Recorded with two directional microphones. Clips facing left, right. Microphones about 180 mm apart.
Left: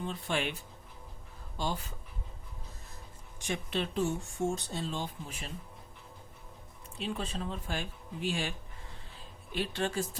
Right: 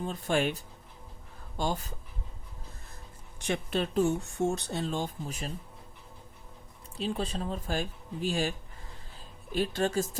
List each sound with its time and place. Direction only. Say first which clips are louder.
0.0 s speech: right 5 dB; 45° right (ahead or behind)
1.5 s speech: right 4 dB; 50° right (ahead or behind)
3.7 s speech: right 5 dB; 45° right (ahead or behind)
4.4 s speech: right 3 dB; 65° right (ahead or behind); by 5.5 s 45° right (ahead or behind)
6.9 s speech: right 4 dB; 35° right (ahead or behind)